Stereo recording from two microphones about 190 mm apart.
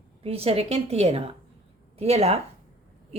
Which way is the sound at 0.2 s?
30° right (ahead or behind).